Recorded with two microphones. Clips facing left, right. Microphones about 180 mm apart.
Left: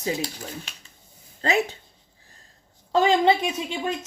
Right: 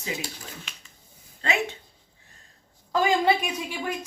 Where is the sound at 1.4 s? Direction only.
35° left (ahead or behind).